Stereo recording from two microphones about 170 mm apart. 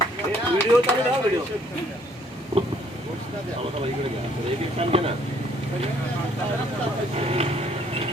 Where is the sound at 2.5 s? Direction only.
35° right (ahead or behind).